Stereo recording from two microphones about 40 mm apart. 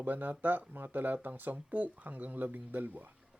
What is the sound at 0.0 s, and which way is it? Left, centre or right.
Speech, right.